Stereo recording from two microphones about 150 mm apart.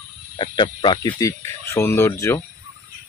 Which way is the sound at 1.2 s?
20° left (ahead or behind).